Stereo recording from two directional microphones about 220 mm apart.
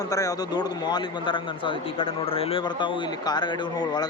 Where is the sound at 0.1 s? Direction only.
15° left (ahead or behind).